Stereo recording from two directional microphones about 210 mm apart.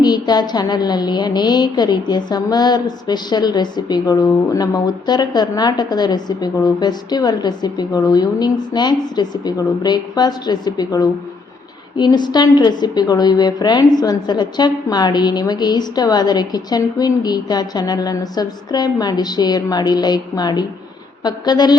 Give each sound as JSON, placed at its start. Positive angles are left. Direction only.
{"t": 0.0, "sound": "a woman's voice", "side_deg": 20}